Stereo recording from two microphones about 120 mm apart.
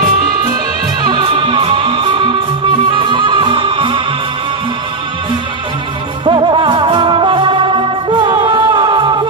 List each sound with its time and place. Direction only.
1.0 s music: 40° right (ahead or behind)
6.2 s music: 45° right (ahead or behind)